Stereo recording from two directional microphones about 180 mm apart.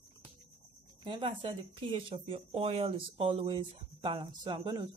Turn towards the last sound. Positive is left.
turn(degrees=-25)  # may be behind; listen again after turning